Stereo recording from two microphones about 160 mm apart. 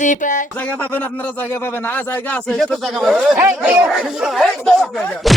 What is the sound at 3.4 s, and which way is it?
Speech, 15° right (ahead or behind).